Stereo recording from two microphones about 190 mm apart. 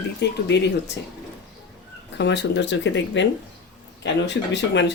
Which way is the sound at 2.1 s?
65° left (ahead or behind).